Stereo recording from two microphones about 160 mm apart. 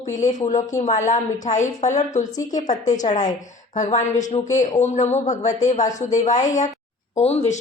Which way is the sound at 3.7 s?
50° left (ahead or behind).